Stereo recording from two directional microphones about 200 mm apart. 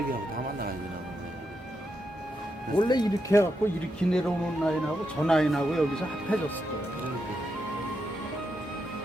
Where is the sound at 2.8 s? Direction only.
20° left (ahead or behind).